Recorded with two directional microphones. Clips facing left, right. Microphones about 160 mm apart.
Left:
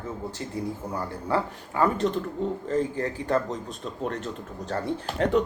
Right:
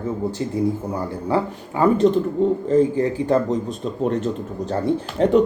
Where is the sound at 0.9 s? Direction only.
20° right (ahead or behind).